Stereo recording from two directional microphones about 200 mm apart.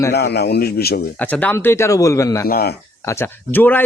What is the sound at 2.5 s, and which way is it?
Speech, 50° left (ahead or behind).